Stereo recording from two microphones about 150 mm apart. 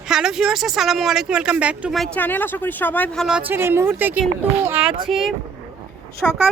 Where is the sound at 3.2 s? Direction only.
10° right (ahead or behind).